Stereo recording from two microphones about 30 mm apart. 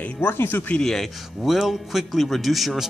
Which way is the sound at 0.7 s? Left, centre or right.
Left.